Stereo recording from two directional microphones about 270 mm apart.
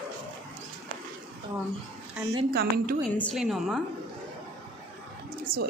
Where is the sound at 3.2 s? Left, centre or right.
Centre.